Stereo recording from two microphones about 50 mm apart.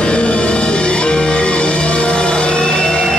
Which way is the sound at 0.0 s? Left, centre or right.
Left.